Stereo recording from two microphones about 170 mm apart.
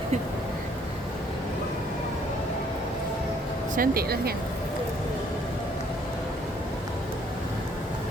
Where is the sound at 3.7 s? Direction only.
60° right (ahead or behind).